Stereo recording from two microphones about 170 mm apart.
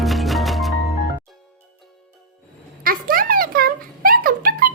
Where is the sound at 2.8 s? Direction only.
60° right (ahead or behind).